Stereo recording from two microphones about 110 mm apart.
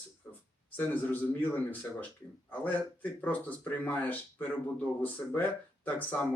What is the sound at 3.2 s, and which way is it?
Speech, 15° left (ahead or behind).